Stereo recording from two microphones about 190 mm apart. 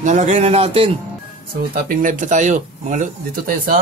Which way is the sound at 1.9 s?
45° right (ahead or behind).